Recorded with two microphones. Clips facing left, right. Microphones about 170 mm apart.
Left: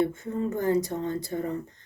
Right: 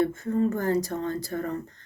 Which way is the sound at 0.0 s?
20° left (ahead or behind).